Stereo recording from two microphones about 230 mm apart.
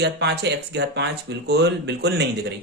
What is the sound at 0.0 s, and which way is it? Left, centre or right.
Speech, right.